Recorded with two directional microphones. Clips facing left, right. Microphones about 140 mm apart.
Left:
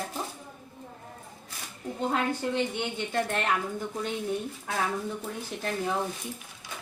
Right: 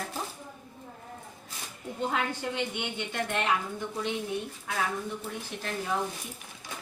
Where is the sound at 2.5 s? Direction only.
35° left (ahead or behind).